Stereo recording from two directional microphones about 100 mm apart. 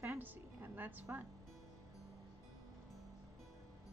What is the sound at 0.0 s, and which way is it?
Music, 20° right (ahead or behind).